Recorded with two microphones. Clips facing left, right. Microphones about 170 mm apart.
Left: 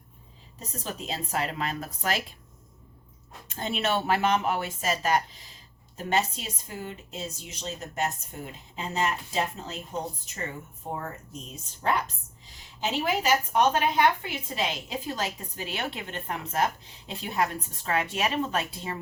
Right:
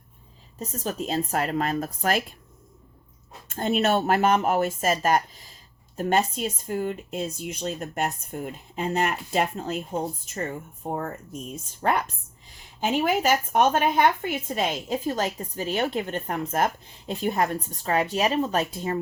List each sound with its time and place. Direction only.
0.9 s a woman's voice: 45° right (ahead or behind)
3.5 s a woman's voice: 50° right (ahead or behind)
10.8 s a woman's voice: 50° right (ahead or behind)